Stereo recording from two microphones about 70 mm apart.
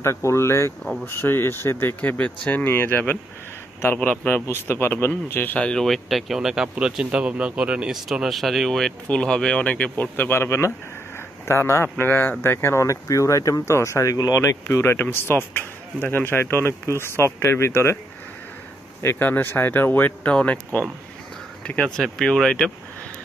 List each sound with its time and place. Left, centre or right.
0.0 s speech: left; by 2.6 s centre
2.6 s speech: left
4.6 s speech: left
5.6 s speech: centre
5.9 s speech: centre; by 17.9 s left
19.0 s speech: left; by 22.7 s centre